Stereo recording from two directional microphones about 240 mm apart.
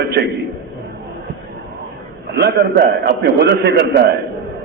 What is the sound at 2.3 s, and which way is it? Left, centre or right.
A man's voice, right.